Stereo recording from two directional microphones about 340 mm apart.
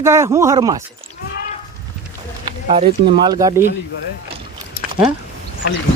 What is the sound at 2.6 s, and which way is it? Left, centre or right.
Speech, centre.